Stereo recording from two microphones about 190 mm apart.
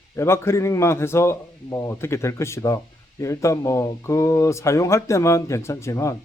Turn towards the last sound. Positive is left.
turn(degrees=15)  # may be behind; listen again after turning